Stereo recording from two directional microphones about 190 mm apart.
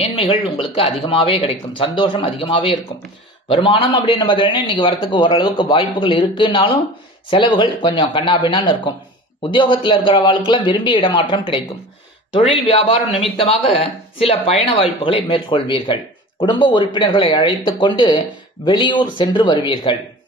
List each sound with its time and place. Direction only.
0.0 s a man's voice: 30° left (ahead or behind)